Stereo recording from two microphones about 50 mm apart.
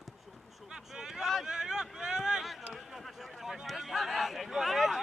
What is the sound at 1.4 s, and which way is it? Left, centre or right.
Vehicle, centre.